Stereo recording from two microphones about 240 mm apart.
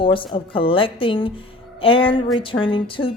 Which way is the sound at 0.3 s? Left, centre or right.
Left.